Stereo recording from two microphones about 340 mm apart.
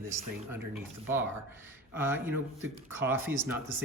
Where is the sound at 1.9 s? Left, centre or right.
Centre.